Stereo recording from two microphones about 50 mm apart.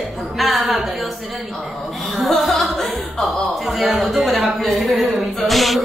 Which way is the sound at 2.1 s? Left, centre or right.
Centre.